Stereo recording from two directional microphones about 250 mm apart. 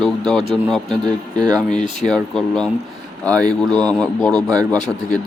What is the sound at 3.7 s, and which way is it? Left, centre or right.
Speech, centre.